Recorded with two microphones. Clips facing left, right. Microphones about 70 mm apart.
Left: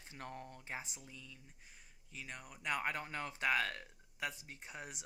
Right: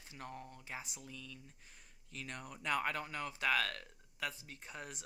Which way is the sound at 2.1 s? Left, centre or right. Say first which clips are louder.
Right 3 dB; centre.